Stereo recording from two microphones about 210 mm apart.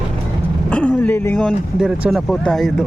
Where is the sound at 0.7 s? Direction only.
5° left (ahead or behind).